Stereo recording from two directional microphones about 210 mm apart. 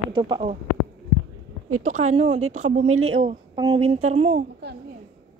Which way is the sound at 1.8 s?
35° right (ahead or behind).